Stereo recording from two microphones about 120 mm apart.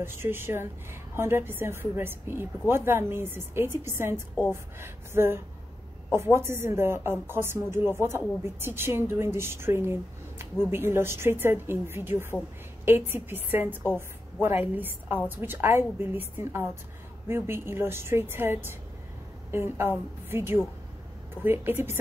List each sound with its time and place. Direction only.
0.0 s a woman's voice: 20° right (ahead or behind)